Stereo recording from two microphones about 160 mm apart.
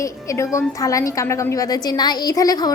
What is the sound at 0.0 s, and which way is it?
A woman's voice, 20° left (ahead or behind).